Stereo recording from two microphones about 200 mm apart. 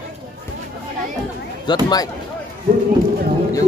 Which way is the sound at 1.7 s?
25° left (ahead or behind).